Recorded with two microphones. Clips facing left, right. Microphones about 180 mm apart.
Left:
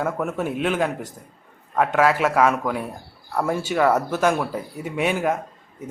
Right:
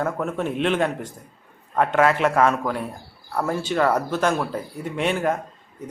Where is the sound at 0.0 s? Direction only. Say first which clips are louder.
Even; 5° left (ahead or behind).